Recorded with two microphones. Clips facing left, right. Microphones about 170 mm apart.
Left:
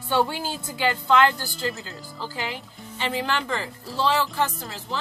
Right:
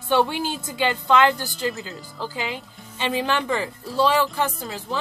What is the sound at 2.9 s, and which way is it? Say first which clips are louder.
A woman's voice: right 3 dB; 20° right (ahead or behind).